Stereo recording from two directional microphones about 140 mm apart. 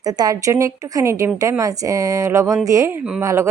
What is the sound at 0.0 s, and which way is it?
A woman's voice, 25° right (ahead or behind).